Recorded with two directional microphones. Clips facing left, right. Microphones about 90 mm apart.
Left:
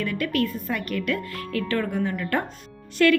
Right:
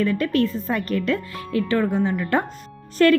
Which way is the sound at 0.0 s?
30° right (ahead or behind).